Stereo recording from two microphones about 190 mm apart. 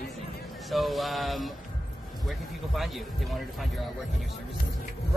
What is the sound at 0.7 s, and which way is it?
Speech, centre (ahead or behind).